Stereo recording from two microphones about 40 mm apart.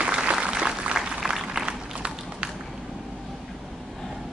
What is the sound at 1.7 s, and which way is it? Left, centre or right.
Run, right.